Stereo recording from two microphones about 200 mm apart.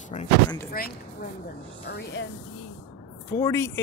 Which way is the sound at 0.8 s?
50° left (ahead or behind).